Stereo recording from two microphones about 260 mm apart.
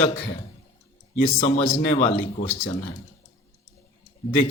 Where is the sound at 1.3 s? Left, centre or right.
Left.